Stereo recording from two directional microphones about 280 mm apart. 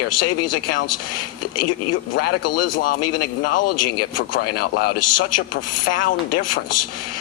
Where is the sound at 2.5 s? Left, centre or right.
Left.